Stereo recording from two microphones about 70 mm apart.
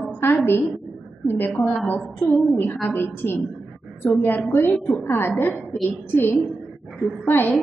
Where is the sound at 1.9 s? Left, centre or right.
Left.